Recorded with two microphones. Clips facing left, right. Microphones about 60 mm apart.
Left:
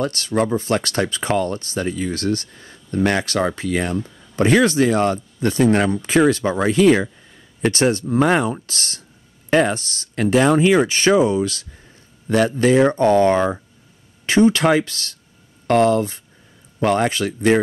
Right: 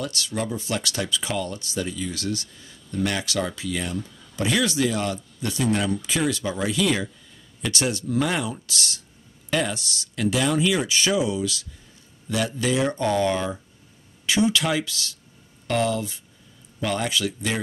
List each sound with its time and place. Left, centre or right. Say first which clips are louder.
0.0 s speech: left 8 dB; left